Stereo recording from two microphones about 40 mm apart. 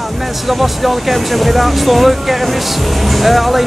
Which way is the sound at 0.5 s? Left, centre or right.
Centre.